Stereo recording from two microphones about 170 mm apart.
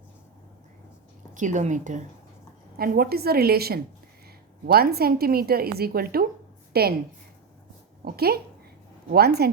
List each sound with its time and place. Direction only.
1.3 s a woman's voice: 45° right (ahead or behind)
2.7 s a woman's voice: 60° right (ahead or behind)
8.0 s speech: 65° right (ahead or behind)